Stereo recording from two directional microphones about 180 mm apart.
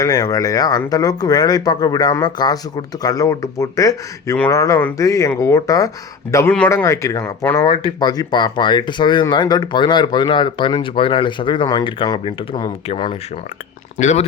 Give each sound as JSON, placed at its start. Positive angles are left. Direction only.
{"t": 0.0, "sound": "speech", "side_deg": 20}
{"t": 6.5, "sound": "speech", "side_deg": 10}
{"t": 14.0, "sound": "speech", "side_deg": 40}